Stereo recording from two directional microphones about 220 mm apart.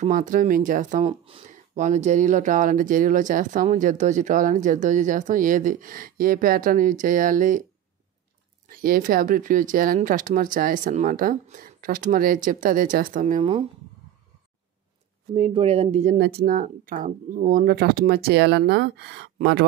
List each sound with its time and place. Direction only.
0.0 s speech: 35° right (ahead or behind)
8.6 s speech: 40° right (ahead or behind)
15.3 s speech: 25° right (ahead or behind)
16.2 s speech: 45° right (ahead or behind)